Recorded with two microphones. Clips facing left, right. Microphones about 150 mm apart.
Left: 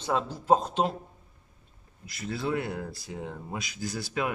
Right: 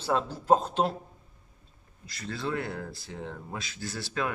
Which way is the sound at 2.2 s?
20° left (ahead or behind).